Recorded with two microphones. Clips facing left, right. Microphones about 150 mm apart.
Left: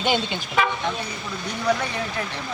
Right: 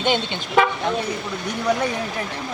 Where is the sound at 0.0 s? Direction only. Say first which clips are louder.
Right 1 dB; 10° left (ahead or behind).